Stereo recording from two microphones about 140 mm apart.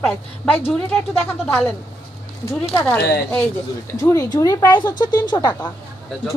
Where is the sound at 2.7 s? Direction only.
15° left (ahead or behind).